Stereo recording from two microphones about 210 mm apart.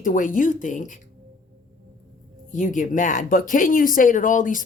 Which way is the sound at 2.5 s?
40° left (ahead or behind).